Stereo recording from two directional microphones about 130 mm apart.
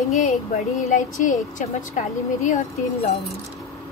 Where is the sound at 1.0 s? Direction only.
75° left (ahead or behind).